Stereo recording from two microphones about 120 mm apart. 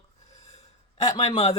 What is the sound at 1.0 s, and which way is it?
Speech, 70° left (ahead or behind).